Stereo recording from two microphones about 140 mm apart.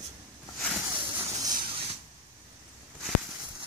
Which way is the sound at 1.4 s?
30° right (ahead or behind).